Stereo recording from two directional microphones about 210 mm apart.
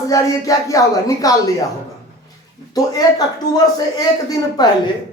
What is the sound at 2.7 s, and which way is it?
Speech, 15° left (ahead or behind).